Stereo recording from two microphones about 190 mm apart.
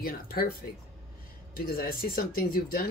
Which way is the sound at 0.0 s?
50° left (ahead or behind).